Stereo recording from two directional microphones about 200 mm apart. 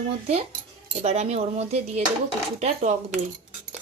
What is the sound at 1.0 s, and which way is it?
A woman's voice, 35° right (ahead or behind).